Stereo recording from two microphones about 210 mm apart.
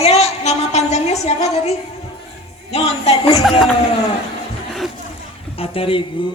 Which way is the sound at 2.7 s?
30° left (ahead or behind).